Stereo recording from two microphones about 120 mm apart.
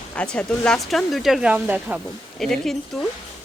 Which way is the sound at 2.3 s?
5° left (ahead or behind).